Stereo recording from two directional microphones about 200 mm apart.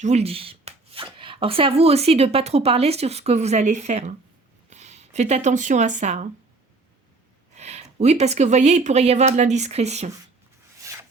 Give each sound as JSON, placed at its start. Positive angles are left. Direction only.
{"t": 0.0, "sound": "speech", "side_deg": -35}
{"t": 7.5, "sound": "speech", "side_deg": -35}
{"t": 10.8, "sound": "wood", "side_deg": -15}